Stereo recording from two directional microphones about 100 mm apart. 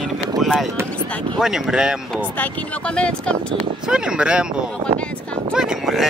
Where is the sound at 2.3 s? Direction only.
15° left (ahead or behind).